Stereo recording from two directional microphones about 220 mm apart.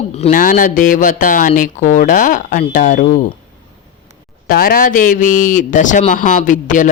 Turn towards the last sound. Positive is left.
turn(degrees=35)  # may be behind; listen again after turning